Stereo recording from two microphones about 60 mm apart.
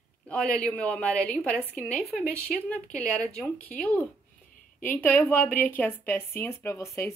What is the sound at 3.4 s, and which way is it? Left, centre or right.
A woman's voice, left.